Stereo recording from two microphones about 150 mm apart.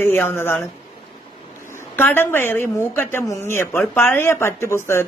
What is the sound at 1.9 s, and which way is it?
Speech, 15° left (ahead or behind).